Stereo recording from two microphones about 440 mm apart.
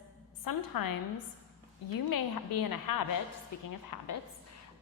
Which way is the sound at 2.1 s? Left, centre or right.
Left.